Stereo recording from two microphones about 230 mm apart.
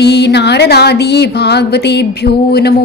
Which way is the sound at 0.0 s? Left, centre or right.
Left.